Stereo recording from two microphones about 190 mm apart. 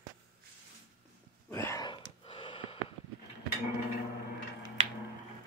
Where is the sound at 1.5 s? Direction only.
15° left (ahead or behind).